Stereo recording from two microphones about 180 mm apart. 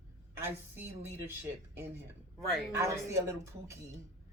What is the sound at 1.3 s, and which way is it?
Speech, 15° right (ahead or behind).